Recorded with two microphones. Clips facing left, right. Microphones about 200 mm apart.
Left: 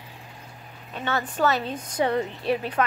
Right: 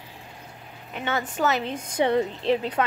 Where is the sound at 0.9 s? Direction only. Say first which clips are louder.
Even; 15° right (ahead or behind).